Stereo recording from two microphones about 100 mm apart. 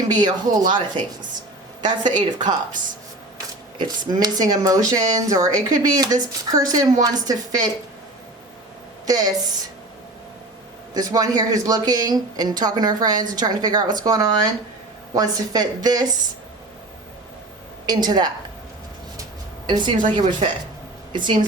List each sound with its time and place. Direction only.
0.1 s speech: 45° right (ahead or behind)
2.0 s speech: 45° right (ahead or behind)
3.8 s speech: 45° right (ahead or behind)
9.0 s speech: 40° right (ahead or behind)
10.9 s speech: 40° right (ahead or behind)
17.8 s speech: 45° right (ahead or behind)
19.6 s a woman's voice: 55° right (ahead or behind)